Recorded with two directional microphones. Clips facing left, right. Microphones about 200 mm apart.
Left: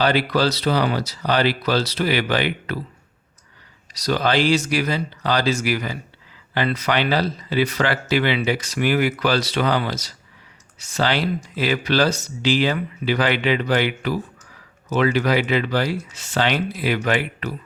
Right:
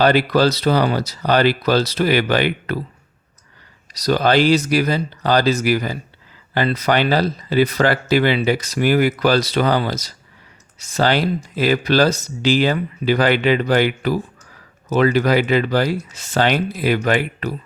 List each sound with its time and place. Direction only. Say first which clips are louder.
0.0 s speech: right 4 dB; 45° right (ahead or behind)
3.9 s speech: right 4 dB; 40° right (ahead or behind)